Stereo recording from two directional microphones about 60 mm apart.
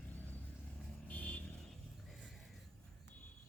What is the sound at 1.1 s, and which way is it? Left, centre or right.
Vehicle, left.